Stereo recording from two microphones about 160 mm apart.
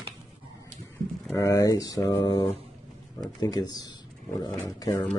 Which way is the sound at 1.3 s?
20° left (ahead or behind).